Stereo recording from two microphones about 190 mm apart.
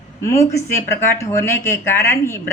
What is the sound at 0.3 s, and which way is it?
Speech, 15° left (ahead or behind).